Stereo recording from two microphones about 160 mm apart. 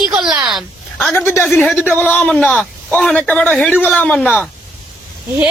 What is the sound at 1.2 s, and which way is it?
A man's voice, 15° left (ahead or behind).